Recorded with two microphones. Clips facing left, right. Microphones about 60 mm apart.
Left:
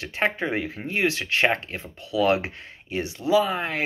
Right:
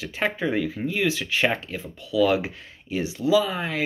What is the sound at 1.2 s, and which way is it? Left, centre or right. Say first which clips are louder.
Speech: left 1 dB; centre.